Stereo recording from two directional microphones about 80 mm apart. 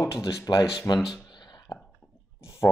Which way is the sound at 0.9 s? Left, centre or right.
Left.